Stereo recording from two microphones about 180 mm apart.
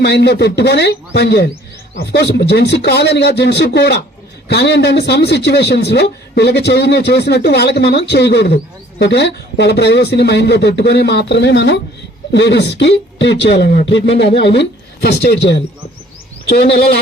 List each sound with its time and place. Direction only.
0.0 s a man's voice: 70° left (ahead or behind)